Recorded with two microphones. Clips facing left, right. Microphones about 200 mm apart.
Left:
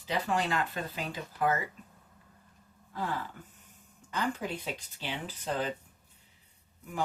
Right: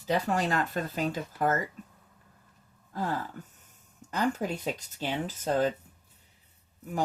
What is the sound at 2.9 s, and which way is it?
Gasp, 40° right (ahead or behind).